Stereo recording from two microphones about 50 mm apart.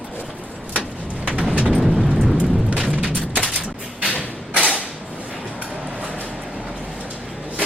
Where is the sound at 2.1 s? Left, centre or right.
Centre.